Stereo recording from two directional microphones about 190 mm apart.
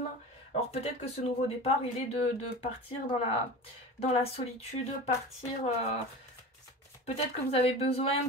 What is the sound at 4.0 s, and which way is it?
Speech, 30° left (ahead or behind).